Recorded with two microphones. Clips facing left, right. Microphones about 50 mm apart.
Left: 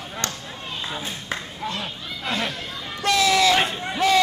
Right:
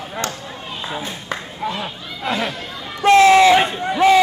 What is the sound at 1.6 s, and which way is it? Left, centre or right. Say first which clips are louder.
Speech: right 4 dB; centre.